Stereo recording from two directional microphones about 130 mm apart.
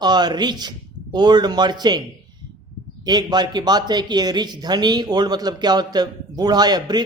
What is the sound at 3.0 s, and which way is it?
Speech, 30° right (ahead or behind).